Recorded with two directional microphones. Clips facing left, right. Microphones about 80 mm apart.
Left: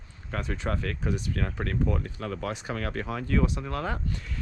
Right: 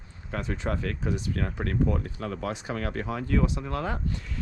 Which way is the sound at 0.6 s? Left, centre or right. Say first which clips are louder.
Right 1 dB; left.